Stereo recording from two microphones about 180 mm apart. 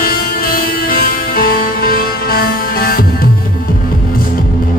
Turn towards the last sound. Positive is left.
turn(degrees=55)  # may be behind; listen again after turning